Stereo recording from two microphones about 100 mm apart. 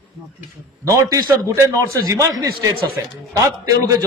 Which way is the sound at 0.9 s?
35° right (ahead or behind).